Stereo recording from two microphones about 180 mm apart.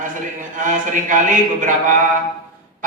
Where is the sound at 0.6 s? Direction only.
45° right (ahead or behind).